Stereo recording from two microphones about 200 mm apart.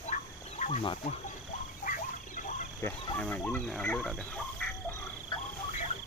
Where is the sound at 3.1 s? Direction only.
5° left (ahead or behind).